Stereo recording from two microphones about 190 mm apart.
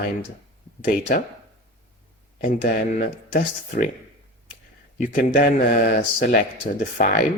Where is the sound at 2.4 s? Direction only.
45° left (ahead or behind).